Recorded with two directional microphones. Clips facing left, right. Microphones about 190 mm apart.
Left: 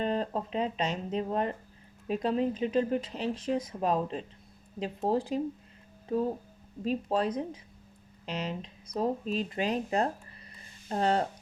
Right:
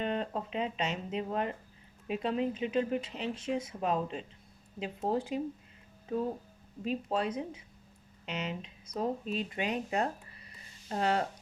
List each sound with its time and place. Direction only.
0.0 s speech: 35° left (ahead or behind)
6.8 s speech: 35° left (ahead or behind)